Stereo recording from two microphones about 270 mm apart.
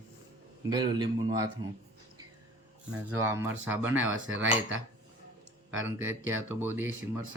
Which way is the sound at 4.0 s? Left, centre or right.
Right.